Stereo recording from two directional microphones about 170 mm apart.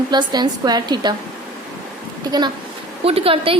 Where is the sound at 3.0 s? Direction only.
35° right (ahead or behind).